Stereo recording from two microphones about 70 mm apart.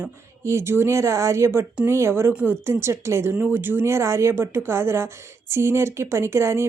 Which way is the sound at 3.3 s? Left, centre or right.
Right.